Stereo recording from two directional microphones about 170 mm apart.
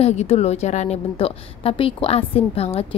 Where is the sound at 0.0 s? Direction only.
40° left (ahead or behind).